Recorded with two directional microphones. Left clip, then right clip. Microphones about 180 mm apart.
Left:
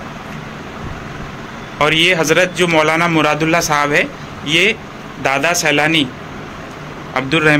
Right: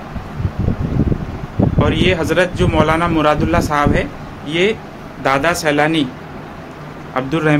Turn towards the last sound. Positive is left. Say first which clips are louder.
# left 3 dB
turn(degrees=0)  # may be behind; listen again after turning